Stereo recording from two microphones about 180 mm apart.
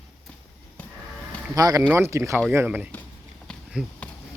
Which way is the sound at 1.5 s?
20° right (ahead or behind).